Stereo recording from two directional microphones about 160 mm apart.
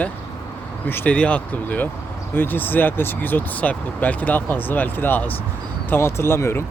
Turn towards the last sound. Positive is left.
turn(degrees=15)  # may be behind; listen again after turning